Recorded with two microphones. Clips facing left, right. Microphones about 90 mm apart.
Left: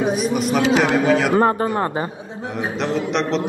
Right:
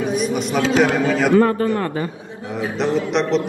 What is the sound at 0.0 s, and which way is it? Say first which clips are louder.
Speech: left 1 dB; 40° left (ahead or behind).